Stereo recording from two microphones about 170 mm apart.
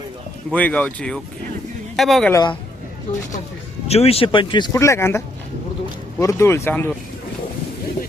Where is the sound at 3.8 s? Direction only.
35° left (ahead or behind); by 6.9 s 10° left (ahead or behind).